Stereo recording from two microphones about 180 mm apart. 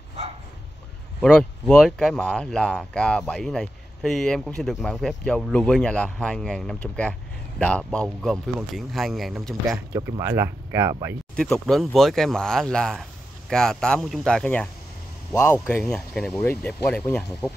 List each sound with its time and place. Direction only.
1.2 s speech: 5° left (ahead or behind)
9.9 s speech: 15° right (ahead or behind)
11.3 s speech: 5° left (ahead or behind)